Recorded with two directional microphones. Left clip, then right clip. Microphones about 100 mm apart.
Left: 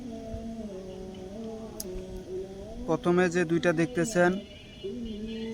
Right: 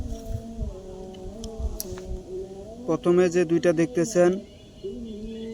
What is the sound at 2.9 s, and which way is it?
Speech, 40° left (ahead or behind).